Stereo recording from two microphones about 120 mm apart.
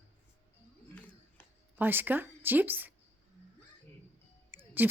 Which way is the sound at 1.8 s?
15° right (ahead or behind).